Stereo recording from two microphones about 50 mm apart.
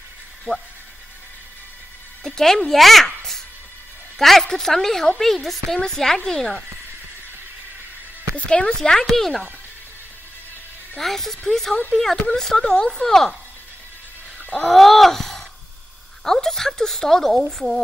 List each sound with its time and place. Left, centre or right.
2.2 s a woman's voice: centre
3.2 s babbling: centre
4.2 s a woman's voice: centre
8.4 s a woman's voice: centre
11.0 s a woman's voice: centre
14.7 s a sound: centre
16.3 s a woman's voice: centre